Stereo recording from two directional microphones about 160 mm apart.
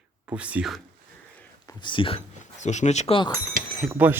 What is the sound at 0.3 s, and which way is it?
Speech, 10° right (ahead or behind).